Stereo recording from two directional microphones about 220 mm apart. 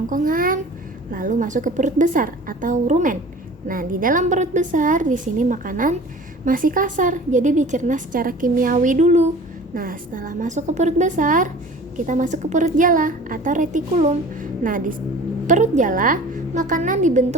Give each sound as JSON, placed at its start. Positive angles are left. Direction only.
{"t": 0.1, "sound": "a woman's voice", "side_deg": -40}